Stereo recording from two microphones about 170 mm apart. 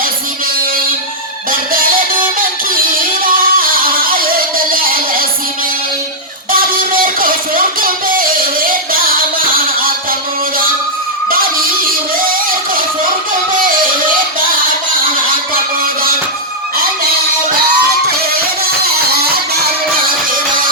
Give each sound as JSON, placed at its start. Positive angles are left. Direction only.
{"t": 1.5, "sound": "music", "side_deg": -55}
{"t": 3.2, "sound": "a sound", "side_deg": -55}
{"t": 6.5, "sound": "music", "side_deg": -55}
{"t": 11.3, "sound": "a sound", "side_deg": -60}
{"t": 12.3, "sound": "music", "side_deg": -55}
{"t": 18.9, "sound": "music", "side_deg": -65}